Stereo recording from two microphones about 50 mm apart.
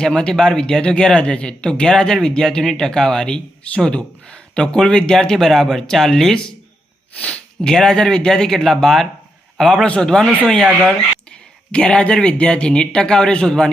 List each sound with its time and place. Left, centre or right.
0.0 s speech: centre
7.6 s a man's voice: centre
9.8 s speech: centre